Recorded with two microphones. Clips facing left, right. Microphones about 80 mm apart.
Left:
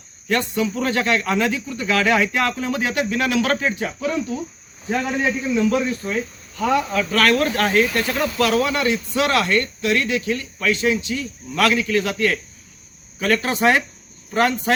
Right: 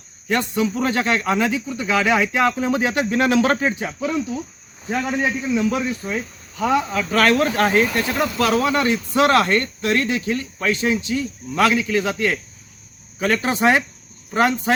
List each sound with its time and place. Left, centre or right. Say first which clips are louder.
0.3 s speech: right 1 dB; right
3.8 s a man's voice: even; centre
7.1 s a man's voice: right 2 dB; right